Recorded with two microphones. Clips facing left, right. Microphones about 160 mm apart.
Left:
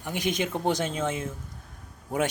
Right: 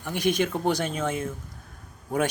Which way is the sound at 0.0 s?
15° left (ahead or behind).